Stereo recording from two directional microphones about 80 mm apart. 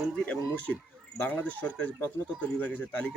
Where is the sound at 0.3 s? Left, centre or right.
Centre.